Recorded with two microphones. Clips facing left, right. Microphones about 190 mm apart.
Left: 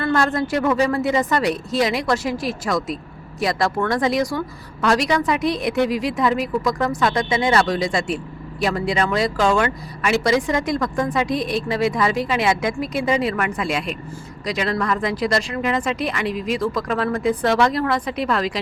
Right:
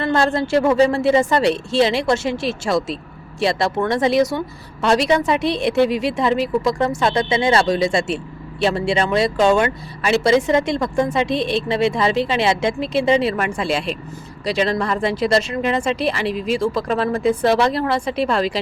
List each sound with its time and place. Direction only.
0.0 s speech: 25° right (ahead or behind)